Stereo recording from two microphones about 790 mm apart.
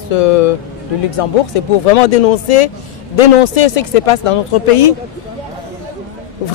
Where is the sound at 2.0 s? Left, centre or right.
Left.